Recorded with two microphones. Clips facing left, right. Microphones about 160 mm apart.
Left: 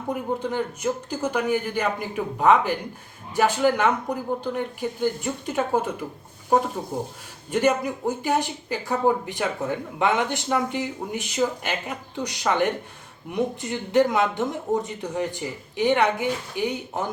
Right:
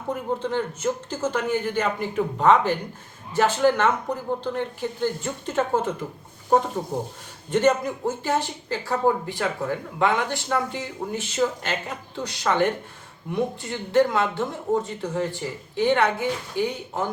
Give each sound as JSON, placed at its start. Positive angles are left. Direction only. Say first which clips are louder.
{"t": 0.1, "sound": "speech", "louder": "right 1 dB", "side_deg": 10}
{"t": 7.5, "sound": "speech", "louder": "right 1 dB", "side_deg": 10}